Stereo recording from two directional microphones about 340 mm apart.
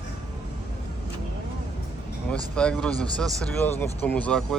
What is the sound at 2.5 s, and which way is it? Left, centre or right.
Speech, centre.